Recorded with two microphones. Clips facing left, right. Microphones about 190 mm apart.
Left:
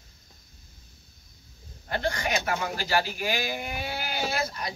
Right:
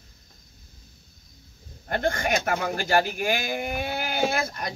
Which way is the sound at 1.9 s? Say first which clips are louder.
Right 3 dB; 50° right (ahead or behind).